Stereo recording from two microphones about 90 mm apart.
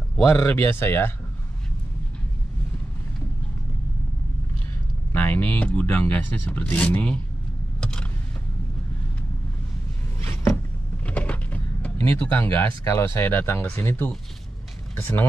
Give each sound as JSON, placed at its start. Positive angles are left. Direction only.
{"t": 0.2, "sound": "speech", "side_deg": 30}
{"t": 5.1, "sound": "speech", "side_deg": 20}
{"t": 7.8, "sound": "vehicle", "side_deg": 10}
{"t": 10.2, "sound": "a sound", "side_deg": 30}
{"t": 11.1, "sound": "speech", "side_deg": 15}